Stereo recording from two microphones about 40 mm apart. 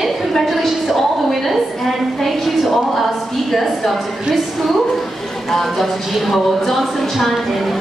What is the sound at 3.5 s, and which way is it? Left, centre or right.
Speech, centre.